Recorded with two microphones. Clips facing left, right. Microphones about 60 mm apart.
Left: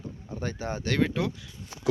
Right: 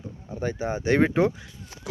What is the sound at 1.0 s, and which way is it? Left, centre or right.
Speech, right.